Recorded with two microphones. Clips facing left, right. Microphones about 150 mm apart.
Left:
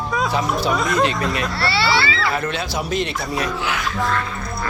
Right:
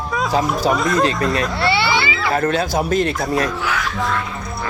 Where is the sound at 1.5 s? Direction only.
20° right (ahead or behind).